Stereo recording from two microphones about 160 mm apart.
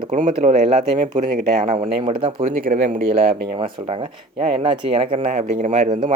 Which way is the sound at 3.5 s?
35° right (ahead or behind).